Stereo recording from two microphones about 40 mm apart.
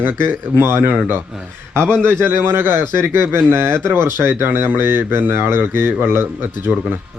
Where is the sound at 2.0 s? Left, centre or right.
Right.